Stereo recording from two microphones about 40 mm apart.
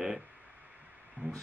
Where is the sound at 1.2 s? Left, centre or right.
Right.